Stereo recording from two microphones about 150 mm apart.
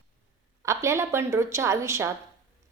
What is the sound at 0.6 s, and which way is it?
A woman's voice, 20° right (ahead or behind).